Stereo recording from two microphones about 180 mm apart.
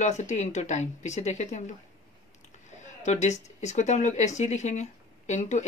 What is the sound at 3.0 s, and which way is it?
Speech, 40° left (ahead or behind).